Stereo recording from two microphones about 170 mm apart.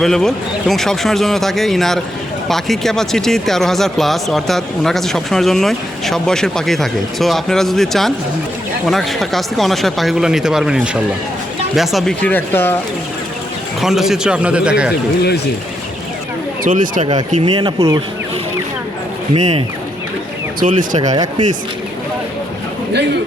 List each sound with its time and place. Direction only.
0.0 s speech: centre (ahead or behind)
13.8 s speech: centre (ahead or behind)
16.6 s speech: 50° right (ahead or behind)
17.4 s speech: 25° right (ahead or behind)
19.4 s speech: 40° right (ahead or behind)
21.0 s speech: 25° right (ahead or behind)